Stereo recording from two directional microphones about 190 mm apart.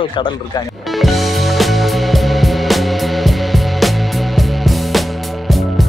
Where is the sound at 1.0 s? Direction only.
Centre (ahead or behind).